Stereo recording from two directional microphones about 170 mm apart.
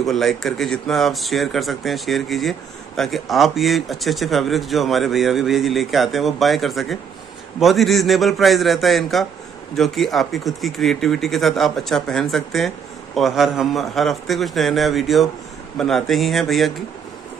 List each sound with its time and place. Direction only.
0.0 s speech: centre (ahead or behind)